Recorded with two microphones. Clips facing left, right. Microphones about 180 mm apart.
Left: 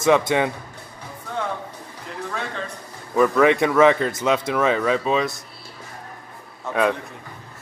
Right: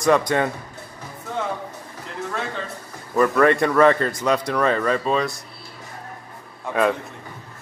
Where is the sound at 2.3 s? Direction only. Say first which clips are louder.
Right 1 dB; centre (ahead or behind).